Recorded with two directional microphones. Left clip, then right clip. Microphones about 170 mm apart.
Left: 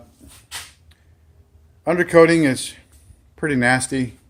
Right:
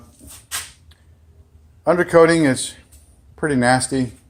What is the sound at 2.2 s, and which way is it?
Speech, 40° left (ahead or behind).